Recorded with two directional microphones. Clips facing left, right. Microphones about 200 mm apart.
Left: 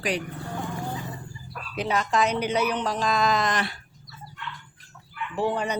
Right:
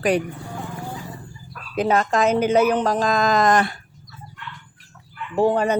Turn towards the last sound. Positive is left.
turn(degrees=-45)  # may be behind; listen again after turning